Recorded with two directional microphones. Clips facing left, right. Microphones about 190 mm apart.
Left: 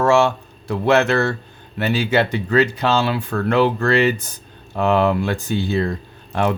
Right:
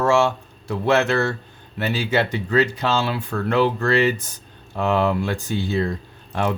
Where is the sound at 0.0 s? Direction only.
65° left (ahead or behind).